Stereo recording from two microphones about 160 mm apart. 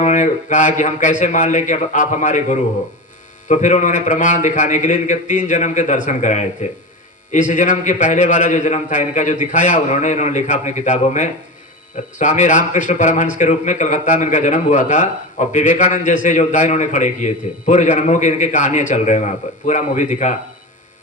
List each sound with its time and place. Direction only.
0.0 s speech: 50° left (ahead or behind)